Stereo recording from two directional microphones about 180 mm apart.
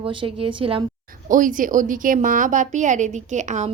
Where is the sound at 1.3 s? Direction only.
45° right (ahead or behind).